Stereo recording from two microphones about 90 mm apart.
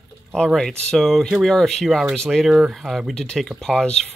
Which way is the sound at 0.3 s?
5° left (ahead or behind).